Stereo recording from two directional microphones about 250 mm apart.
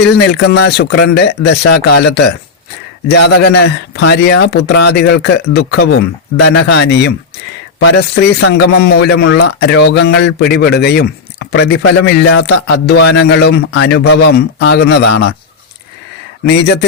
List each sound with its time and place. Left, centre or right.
0.2 s speech: left
1.7 s music: left
3.1 s speech: left
7.8 s music: left
8.4 s speech: left
11.9 s music: left
13.2 s speech: left